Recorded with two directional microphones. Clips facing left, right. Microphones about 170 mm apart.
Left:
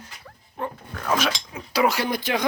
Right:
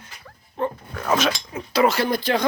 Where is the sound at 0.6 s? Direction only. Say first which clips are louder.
Right 5 dB; 10° left (ahead or behind).